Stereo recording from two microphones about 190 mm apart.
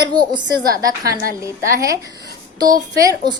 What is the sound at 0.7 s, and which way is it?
A woman's voice, 20° right (ahead or behind).